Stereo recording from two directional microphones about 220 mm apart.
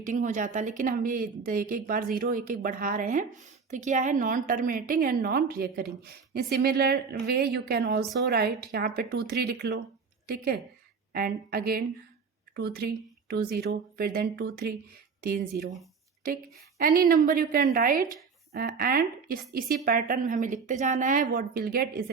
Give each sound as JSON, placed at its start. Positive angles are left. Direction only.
{"t": 0.0, "sound": "a woman's voice", "side_deg": -35}